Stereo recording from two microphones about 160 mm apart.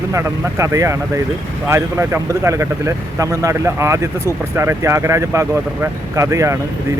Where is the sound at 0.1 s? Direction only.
15° right (ahead or behind).